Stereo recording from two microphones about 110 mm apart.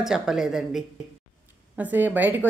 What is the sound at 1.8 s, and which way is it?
Speech, 15° right (ahead or behind).